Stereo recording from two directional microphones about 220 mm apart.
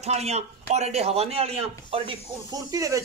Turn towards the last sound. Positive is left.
turn(degrees=-15)  # may be behind; listen again after turning